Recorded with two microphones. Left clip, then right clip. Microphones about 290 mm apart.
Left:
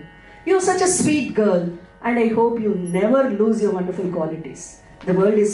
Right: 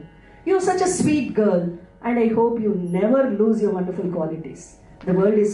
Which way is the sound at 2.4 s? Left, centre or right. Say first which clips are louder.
Left 1 dB; right.